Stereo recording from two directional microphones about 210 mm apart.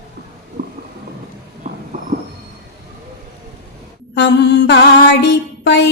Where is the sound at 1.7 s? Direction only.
35° right (ahead or behind).